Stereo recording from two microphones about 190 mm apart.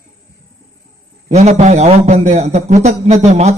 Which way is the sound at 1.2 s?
35° right (ahead or behind).